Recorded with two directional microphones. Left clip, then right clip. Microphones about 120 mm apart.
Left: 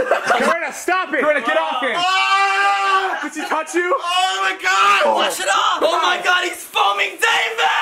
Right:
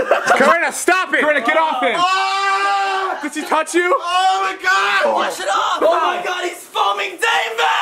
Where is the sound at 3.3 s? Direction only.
15° right (ahead or behind).